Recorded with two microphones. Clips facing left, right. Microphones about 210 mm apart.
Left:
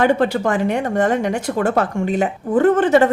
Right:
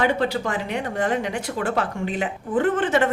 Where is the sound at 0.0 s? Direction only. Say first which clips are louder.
Left 6 dB; 50° left (ahead or behind).